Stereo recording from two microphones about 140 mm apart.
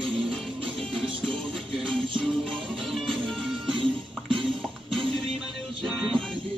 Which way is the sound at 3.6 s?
35° right (ahead or behind).